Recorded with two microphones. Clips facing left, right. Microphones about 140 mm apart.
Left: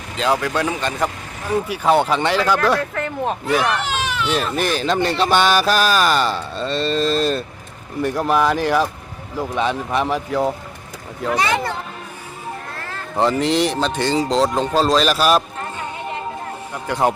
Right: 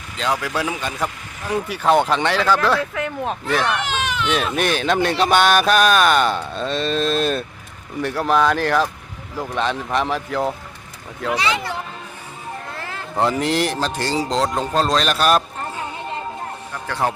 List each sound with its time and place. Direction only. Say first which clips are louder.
0.2 s speech: left 3 dB; centre (ahead or behind)
1.6 s speech: right 1 dB; 10° left (ahead or behind)
2.9 s speech: left 2 dB; 5° right (ahead or behind)
3.4 s speech: left 1 dB; 5° left (ahead or behind)
8.0 s speech: even; 10° left (ahead or behind)
11.3 s speech: left 4 dB; 50° left (ahead or behind)
13.1 s speech: left 2 dB; 5° right (ahead or behind)
16.7 s speech: left 3 dB; 20° left (ahead or behind)